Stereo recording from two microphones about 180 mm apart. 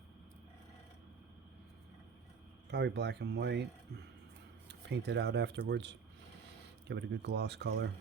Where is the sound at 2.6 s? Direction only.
65° right (ahead or behind).